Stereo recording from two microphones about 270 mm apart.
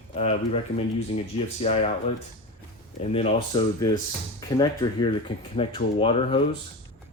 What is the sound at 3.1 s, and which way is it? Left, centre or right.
Speech, left.